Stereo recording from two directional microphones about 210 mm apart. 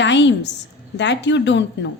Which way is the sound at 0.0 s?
60° left (ahead or behind).